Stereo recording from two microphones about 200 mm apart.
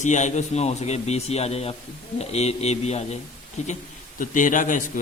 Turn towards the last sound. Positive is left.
turn(degrees=40)  # may be behind; listen again after turning